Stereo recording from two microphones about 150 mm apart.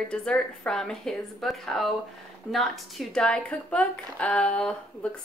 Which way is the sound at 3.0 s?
5° left (ahead or behind).